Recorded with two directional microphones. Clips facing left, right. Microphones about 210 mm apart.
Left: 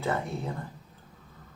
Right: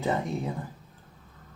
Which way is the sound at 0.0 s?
15° right (ahead or behind).